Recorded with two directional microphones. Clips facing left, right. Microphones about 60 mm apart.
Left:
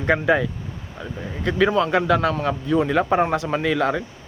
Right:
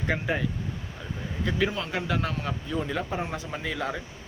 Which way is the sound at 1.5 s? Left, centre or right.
Left.